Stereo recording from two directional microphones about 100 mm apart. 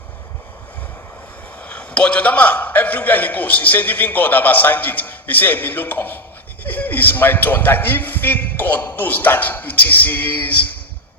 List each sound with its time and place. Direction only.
1.6 s a man's voice: 15° left (ahead or behind)